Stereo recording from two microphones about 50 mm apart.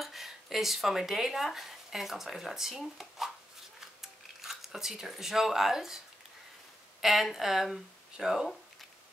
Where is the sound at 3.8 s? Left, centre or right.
Centre.